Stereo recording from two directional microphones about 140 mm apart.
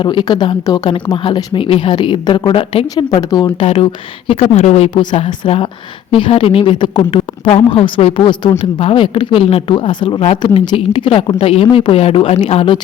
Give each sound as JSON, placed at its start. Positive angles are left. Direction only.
{"t": 0.0, "sound": "speech", "side_deg": 35}
{"t": 2.9, "sound": "speech", "side_deg": 30}
{"t": 4.5, "sound": "speech", "side_deg": 50}